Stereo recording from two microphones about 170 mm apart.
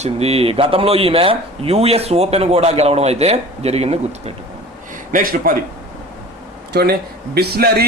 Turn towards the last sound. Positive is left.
turn(degrees=-65)  # may be behind; listen again after turning